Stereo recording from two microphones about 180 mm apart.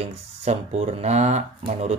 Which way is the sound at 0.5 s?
40° right (ahead or behind).